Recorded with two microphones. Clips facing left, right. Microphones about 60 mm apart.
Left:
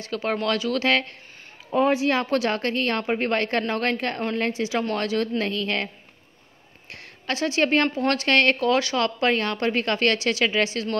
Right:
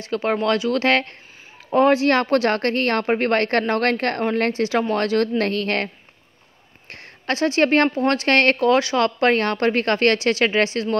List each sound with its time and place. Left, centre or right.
0.0 s speech: right
0.7 s speech: right
1.7 s speech: right
2.2 s a woman's voice: right
4.9 s a woman's voice: right
6.9 s speech: right
8.0 s speech: right